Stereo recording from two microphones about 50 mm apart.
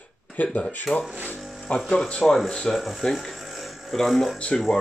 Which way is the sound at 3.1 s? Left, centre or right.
Centre.